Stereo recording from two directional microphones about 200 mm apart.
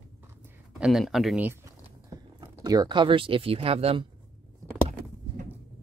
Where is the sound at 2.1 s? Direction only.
20° right (ahead or behind).